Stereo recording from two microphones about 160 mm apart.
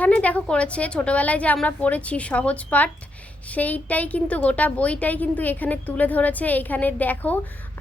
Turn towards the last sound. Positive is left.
turn(degrees=10)  # may be behind; listen again after turning